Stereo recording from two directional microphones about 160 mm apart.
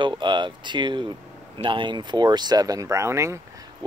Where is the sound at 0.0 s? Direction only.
30° right (ahead or behind).